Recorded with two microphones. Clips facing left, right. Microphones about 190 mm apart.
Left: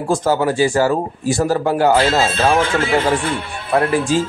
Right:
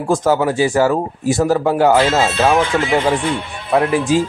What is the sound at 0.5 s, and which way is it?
Speech, 20° right (ahead or behind).